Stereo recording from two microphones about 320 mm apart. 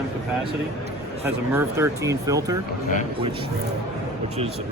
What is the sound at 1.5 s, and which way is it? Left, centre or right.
Speech, centre.